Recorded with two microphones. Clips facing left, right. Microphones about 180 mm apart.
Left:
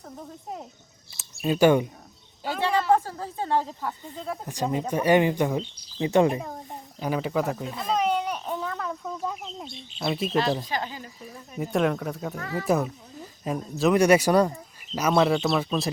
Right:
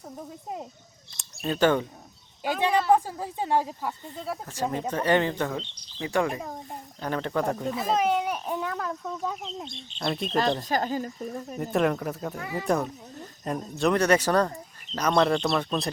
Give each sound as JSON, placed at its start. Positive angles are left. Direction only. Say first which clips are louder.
{"t": 1.1, "sound": "speech", "louder": "left 4 dB", "side_deg": 5}
{"t": 2.4, "sound": "a sound", "louder": "right 1 dB", "side_deg": -15}
{"t": 2.9, "sound": "a woman's voice", "louder": "even", "side_deg": -15}
{"t": 4.4, "sound": "speech", "louder": "left 3 dB", "side_deg": 15}
{"t": 7.0, "sound": "a child's voice", "louder": "left 1 dB", "side_deg": 5}
{"t": 10.7, "sound": "speech", "louder": "right 5 dB", "side_deg": -45}
{"t": 11.5, "sound": "a child's voice", "louder": "left 1 dB", "side_deg": 0}
{"t": 12.4, "sound": "a woman's voice", "louder": "left 1 dB", "side_deg": -15}
{"t": 12.6, "sound": "a child's voice", "louder": "left 2 dB", "side_deg": 5}